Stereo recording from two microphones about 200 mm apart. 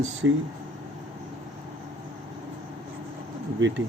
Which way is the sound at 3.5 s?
65° right (ahead or behind).